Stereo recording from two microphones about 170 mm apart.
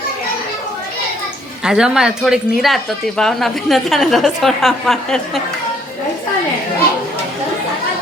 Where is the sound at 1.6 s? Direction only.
5° right (ahead or behind).